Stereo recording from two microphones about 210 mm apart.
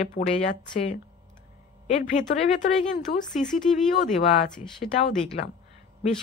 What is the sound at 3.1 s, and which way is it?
Speech, 45° left (ahead or behind).